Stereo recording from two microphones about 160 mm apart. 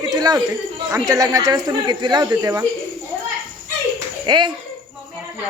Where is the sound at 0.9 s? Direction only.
20° right (ahead or behind).